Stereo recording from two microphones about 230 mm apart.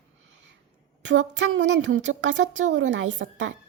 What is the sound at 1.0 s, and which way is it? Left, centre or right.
A woman's voice, right.